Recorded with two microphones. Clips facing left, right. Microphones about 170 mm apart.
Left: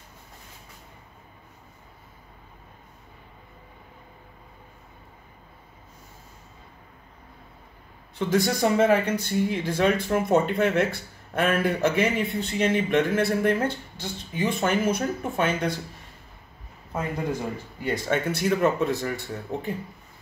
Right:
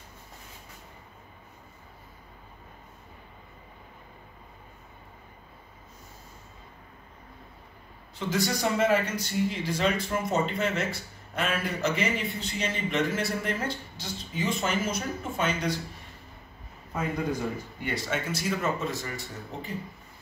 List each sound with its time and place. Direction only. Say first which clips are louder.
8.3 s speech: left 5 dB; 55° left (ahead or behind)
17.8 s speech: left 6 dB; 50° left (ahead or behind)